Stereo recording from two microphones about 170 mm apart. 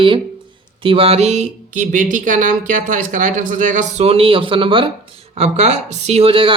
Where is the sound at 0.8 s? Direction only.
35° right (ahead or behind).